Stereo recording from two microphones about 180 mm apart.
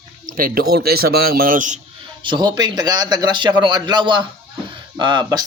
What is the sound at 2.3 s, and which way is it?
Speech, 25° right (ahead or behind).